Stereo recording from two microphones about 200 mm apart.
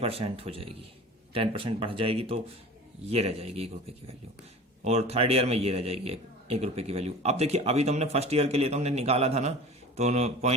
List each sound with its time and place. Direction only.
0.0 s a man's voice: 30° right (ahead or behind)
4.8 s a man's voice: 30° right (ahead or behind)